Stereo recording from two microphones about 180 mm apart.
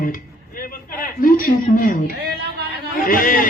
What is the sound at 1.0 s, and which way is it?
Speech, 50° left (ahead or behind).